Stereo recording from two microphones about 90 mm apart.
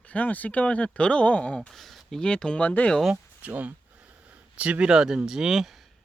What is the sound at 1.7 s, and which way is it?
Speech, centre (ahead or behind).